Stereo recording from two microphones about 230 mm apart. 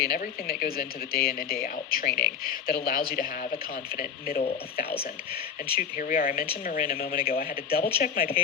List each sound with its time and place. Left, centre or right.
0.0 s speech: left
5.7 s speech: left